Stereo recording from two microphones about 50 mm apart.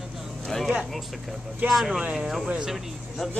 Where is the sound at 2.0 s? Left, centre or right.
Right.